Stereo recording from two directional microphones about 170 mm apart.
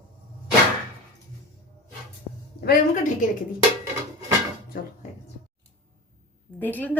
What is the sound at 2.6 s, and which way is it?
Speech, 55° left (ahead or behind).